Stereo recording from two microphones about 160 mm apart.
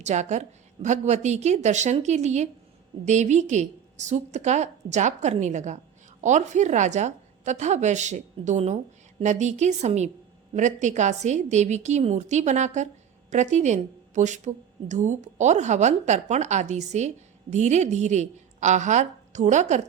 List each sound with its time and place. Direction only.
0.0 s a woman's voice: 45° right (ahead or behind)